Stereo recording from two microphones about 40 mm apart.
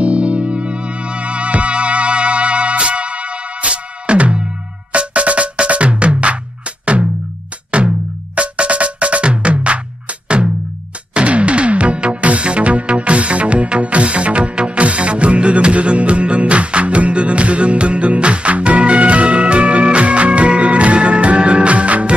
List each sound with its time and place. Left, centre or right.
0.0 s music: right